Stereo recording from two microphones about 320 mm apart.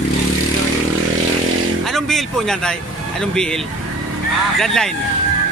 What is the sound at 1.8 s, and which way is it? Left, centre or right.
Speech, centre.